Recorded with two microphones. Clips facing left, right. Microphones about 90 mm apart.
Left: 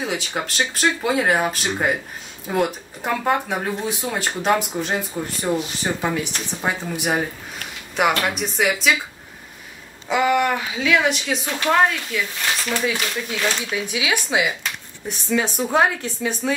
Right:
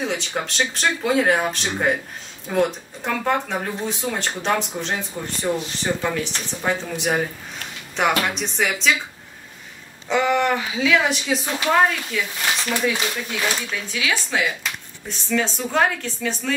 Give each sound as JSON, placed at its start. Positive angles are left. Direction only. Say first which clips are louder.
{"t": 0.0, "sound": "speech", "louder": "even", "side_deg": 5}
{"t": 10.0, "sound": "speech", "louder": "left 1 dB", "side_deg": 5}
{"t": 13.7, "sound": "speech", "louder": "left 2 dB", "side_deg": 15}